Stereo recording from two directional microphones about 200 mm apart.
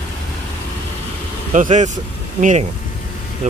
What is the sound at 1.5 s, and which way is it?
Speech, 40° right (ahead or behind).